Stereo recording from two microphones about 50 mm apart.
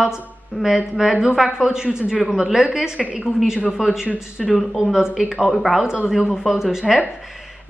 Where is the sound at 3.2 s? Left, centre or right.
Centre.